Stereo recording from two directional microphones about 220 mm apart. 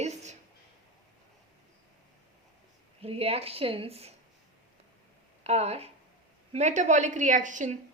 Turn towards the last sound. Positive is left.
turn(degrees=-35)  # may be behind; listen again after turning